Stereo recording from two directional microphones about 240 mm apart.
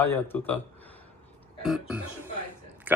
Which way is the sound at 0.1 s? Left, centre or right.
Centre.